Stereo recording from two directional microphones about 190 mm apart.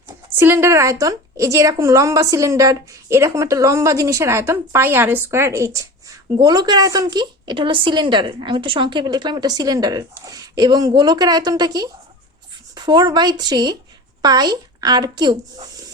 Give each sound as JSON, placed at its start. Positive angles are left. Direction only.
{"t": 0.3, "sound": "a woman's voice", "side_deg": -10}